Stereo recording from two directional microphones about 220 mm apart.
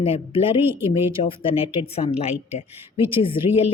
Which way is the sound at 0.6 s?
10° right (ahead or behind).